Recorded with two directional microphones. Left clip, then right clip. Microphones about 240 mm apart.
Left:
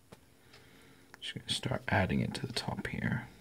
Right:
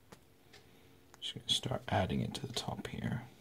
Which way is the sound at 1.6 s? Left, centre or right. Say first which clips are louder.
Left 3 dB; centre.